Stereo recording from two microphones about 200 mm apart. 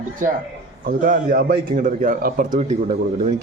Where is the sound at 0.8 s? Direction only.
40° right (ahead or behind).